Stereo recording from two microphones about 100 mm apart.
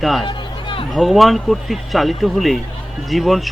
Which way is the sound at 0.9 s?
Centre (ahead or behind).